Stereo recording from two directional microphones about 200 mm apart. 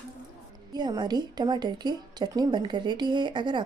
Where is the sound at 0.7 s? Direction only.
20° right (ahead or behind).